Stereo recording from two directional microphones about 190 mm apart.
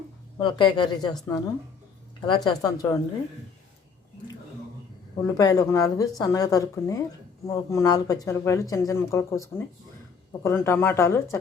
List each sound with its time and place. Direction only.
0.3 s speech: 25° left (ahead or behind)
2.2 s speech: 20° left (ahead or behind)
5.2 s speech: 20° left (ahead or behind)